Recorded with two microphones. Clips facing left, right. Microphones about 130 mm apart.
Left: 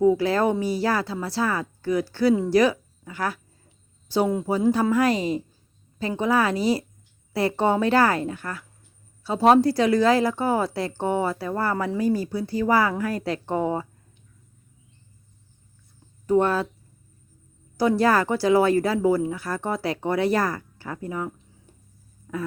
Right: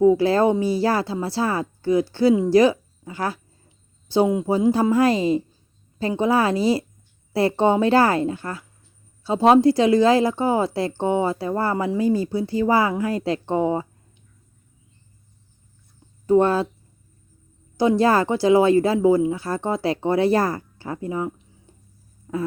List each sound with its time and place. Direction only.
0.0 s a woman's voice: 25° right (ahead or behind)
16.2 s speech: 30° right (ahead or behind)
17.7 s speech: 25° right (ahead or behind)
22.3 s a sound: 25° right (ahead or behind)